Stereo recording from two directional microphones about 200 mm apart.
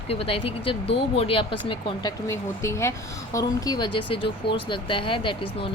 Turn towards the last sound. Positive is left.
turn(degrees=25)  # may be behind; listen again after turning